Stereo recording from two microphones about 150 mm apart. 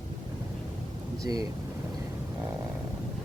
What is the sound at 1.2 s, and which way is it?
Speech, 25° right (ahead or behind).